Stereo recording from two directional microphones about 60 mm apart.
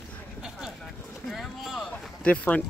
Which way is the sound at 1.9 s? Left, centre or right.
Left.